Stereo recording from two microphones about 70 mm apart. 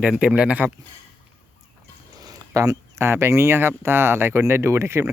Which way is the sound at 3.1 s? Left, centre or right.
Right.